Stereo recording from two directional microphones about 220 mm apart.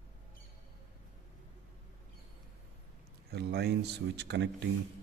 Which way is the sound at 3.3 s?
50° right (ahead or behind).